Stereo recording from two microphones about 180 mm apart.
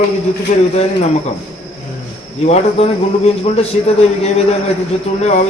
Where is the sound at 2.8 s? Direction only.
35° left (ahead or behind).